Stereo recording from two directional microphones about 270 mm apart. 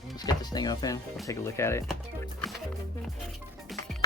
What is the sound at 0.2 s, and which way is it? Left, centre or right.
Speech, centre.